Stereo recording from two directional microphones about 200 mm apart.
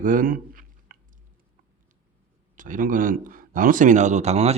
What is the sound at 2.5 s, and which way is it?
Speech, 40° right (ahead or behind).